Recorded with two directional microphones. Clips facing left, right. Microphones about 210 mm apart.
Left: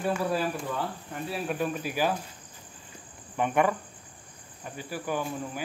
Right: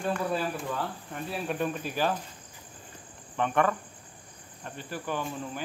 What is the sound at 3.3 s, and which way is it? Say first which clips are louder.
Cricket: left 1 dB; 10° left (ahead or behind).